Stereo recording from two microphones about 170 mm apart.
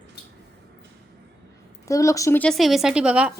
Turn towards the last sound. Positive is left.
turn(degrees=-5)  # may be behind; listen again after turning